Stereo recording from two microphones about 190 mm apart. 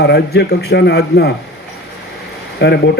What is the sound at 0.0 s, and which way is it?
A man's voice, 60° left (ahead or behind).